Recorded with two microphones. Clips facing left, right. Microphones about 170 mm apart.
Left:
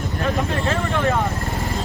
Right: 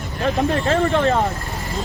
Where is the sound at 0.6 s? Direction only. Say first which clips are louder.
Right 4 dB; 35° right (ahead or behind).